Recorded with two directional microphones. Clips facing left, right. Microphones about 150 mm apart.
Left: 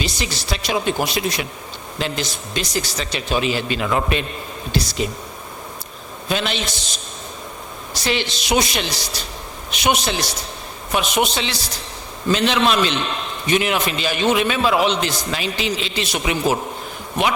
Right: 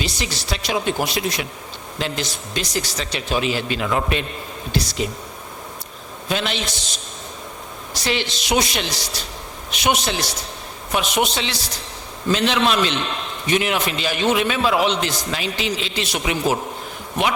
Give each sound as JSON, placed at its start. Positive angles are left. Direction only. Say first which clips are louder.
{"t": 0.0, "sound": "a man's voice", "louder": "left 1 dB", "side_deg": 5}
{"t": 6.2, "sound": "a man's voice", "louder": "left 1 dB", "side_deg": 10}
{"t": 7.9, "sound": "a man's voice", "louder": "left 1 dB", "side_deg": 10}